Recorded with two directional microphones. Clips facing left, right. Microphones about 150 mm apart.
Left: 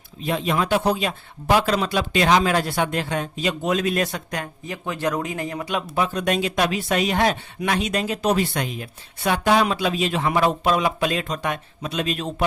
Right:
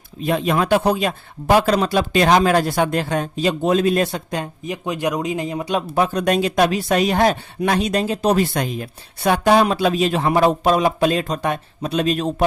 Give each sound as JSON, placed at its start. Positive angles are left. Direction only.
{"t": 0.2, "sound": "speech", "side_deg": -50}
{"t": 5.6, "sound": "speech", "side_deg": -35}